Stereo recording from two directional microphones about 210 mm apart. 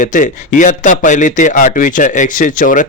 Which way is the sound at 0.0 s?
35° left (ahead or behind).